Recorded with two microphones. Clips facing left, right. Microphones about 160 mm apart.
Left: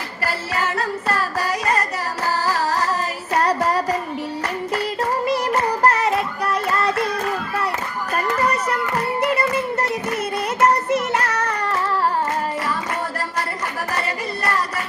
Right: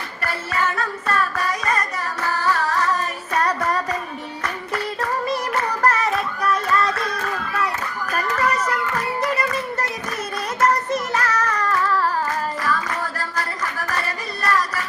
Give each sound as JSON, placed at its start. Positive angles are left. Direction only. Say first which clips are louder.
{"t": 0.3, "sound": "music", "louder": "even", "side_deg": 30}
{"t": 5.5, "sound": "child singing", "louder": "left 2 dB", "side_deg": 30}
{"t": 7.0, "sound": "a sound", "louder": "left 3 dB", "side_deg": 30}
{"t": 8.6, "sound": "music", "louder": "left 2 dB", "side_deg": 30}
{"t": 11.2, "sound": "child singing", "louder": "even", "side_deg": 30}
{"t": 13.3, "sound": "a sound", "louder": "left 1 dB", "side_deg": 30}